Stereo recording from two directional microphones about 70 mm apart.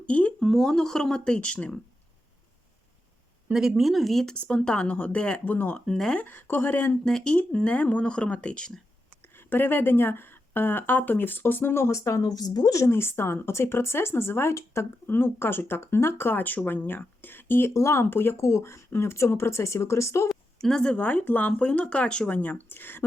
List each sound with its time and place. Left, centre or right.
0.0 s speech: centre
0.4 s speech: centre
3.5 s speech: centre
4.4 s a woman's voice: centre
5.8 s speech: centre
6.1 s a woman's voice: left
7.0 s speech: centre
9.3 s speech: left
12.9 s speech: left
17.7 s speech: left
20.2 s a woman's voice: centre; by 23.0 s left